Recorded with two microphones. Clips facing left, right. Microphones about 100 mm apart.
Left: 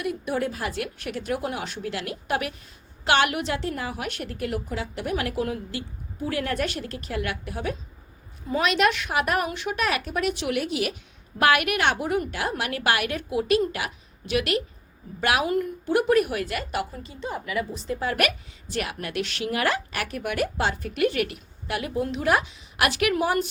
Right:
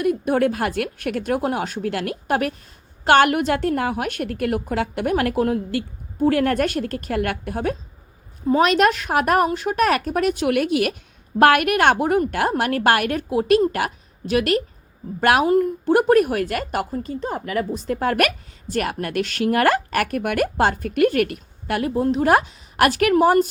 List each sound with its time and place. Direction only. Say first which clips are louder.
0.0 s a woman's voice: right 8 dB; 50° right (ahead or behind)